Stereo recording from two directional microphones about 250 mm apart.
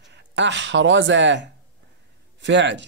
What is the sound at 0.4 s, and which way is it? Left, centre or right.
Speech, right.